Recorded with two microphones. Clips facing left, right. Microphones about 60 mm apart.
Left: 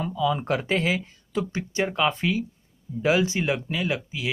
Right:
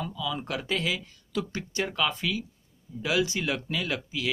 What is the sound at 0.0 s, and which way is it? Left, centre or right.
Speech, left.